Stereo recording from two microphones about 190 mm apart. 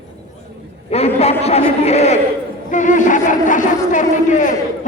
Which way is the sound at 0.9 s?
35° left (ahead or behind).